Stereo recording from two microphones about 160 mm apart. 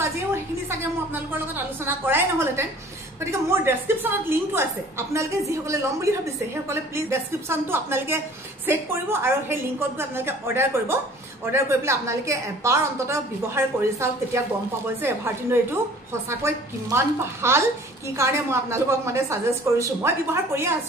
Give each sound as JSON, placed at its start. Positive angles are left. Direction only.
{"t": 1.9, "sound": "a woman's voice", "side_deg": -15}
{"t": 15.0, "sound": "a woman's voice", "side_deg": -15}